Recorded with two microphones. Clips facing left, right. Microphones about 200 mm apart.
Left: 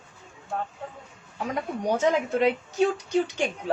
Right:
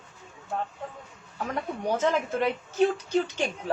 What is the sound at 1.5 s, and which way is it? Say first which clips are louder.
Speech: left 2 dB; 15° left (ahead or behind).